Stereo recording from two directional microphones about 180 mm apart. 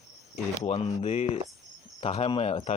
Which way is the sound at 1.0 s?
35° left (ahead or behind).